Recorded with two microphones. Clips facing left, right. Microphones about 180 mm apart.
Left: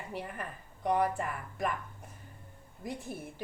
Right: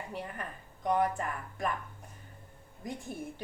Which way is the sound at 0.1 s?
5° left (ahead or behind).